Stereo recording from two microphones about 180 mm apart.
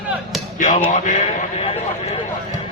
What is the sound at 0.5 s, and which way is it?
Music, 45° left (ahead or behind).